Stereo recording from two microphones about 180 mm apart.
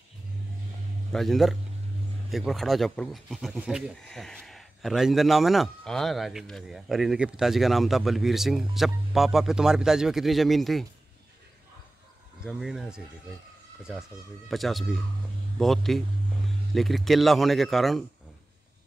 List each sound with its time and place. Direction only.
1.1 s speech: centre (ahead or behind)
12.4 s speech: centre (ahead or behind)
14.5 s speech: centre (ahead or behind)